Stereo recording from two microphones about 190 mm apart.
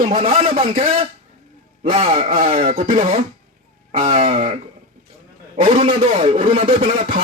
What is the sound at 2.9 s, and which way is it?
A man's voice, 30° right (ahead or behind).